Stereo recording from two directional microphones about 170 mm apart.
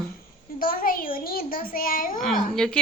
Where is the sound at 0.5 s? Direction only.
55° left (ahead or behind).